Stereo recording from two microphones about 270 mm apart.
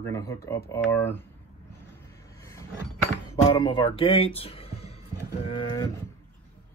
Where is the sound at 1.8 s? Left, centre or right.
Centre.